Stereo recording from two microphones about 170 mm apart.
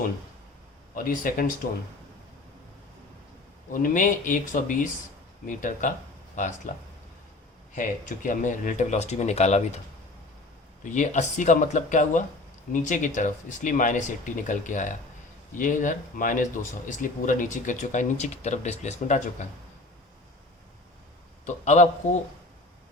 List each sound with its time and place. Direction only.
0.9 s speech: 55° left (ahead or behind)
3.7 s speech: 50° left (ahead or behind)
10.8 s speech: 45° left (ahead or behind)
21.4 s speech: 45° left (ahead or behind)